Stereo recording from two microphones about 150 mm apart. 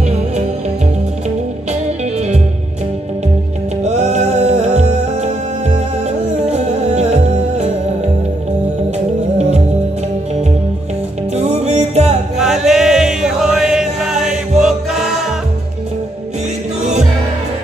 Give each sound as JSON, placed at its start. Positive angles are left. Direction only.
{"t": 3.8, "sound": "music", "side_deg": -50}
{"t": 6.5, "sound": "music", "side_deg": -45}
{"t": 11.3, "sound": "music", "side_deg": -45}
{"t": 12.4, "sound": "chant", "side_deg": 0}
{"t": 14.6, "sound": "music", "side_deg": -5}